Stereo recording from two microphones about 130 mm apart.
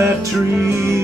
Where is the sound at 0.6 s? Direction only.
20° right (ahead or behind).